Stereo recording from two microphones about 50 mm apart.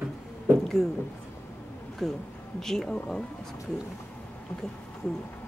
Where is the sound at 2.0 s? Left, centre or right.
Centre.